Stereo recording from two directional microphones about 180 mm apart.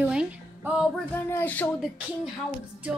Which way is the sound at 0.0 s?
5° right (ahead or behind).